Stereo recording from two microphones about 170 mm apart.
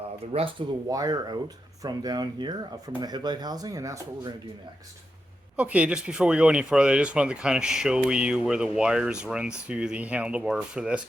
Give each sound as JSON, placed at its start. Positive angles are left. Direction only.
{"t": 0.3, "sound": "speech", "side_deg": -35}
{"t": 0.9, "sound": "speech", "side_deg": -20}
{"t": 5.5, "sound": "speech", "side_deg": -10}